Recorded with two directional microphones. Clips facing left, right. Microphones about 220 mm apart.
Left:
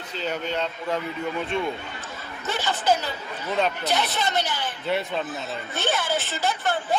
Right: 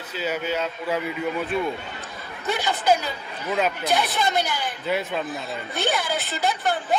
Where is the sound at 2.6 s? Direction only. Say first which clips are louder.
Right 1 dB; 15° right (ahead or behind).